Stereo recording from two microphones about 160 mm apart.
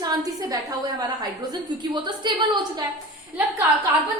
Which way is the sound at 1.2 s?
25° right (ahead or behind).